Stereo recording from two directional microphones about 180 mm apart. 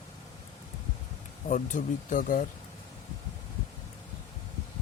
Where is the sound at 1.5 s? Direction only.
45° left (ahead or behind).